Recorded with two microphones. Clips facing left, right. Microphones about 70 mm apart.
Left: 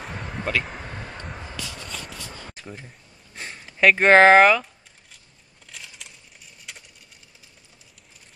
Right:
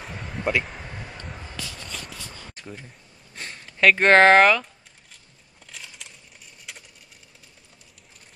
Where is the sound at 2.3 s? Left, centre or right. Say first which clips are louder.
Left 3 dB; centre.